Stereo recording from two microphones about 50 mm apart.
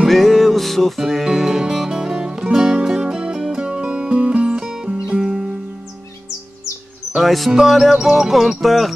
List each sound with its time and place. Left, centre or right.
0.1 s music: centre
3.6 s music: centre
7.2 s music: centre